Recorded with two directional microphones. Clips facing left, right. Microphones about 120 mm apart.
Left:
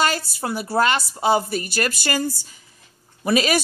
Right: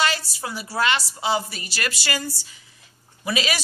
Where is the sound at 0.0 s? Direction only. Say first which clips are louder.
Left 3 dB; 50° left (ahead or behind).